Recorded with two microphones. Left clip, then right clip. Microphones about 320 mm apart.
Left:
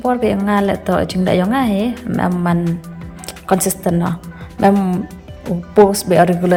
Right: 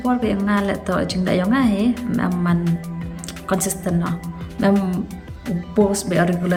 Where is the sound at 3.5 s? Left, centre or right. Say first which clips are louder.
Left 7 dB; centre.